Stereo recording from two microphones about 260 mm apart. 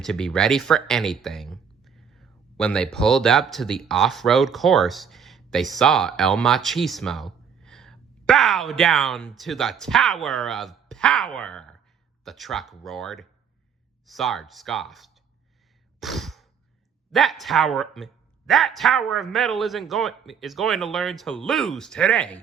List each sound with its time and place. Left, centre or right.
0.0 s speech: centre
16.0 s sigh: centre
17.1 s speech: centre